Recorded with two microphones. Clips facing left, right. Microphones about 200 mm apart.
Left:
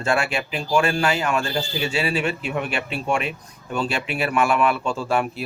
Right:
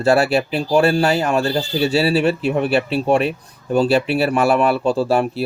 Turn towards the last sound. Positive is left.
turn(degrees=-35)  # may be behind; listen again after turning